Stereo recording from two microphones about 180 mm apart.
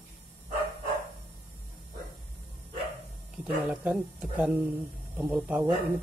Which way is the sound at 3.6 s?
5° right (ahead or behind).